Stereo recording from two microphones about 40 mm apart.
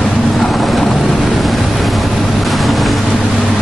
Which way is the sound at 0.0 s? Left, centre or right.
Centre.